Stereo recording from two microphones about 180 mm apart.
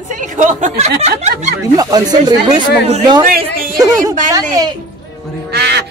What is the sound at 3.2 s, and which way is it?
Speech, 50° right (ahead or behind).